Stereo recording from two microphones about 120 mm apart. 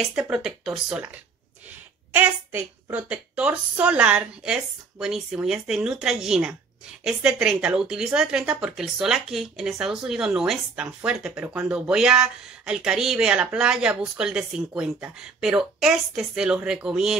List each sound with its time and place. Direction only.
0.0 s a woman's voice: 5° right (ahead or behind)